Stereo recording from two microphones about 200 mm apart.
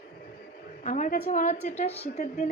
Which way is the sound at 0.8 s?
40° left (ahead or behind).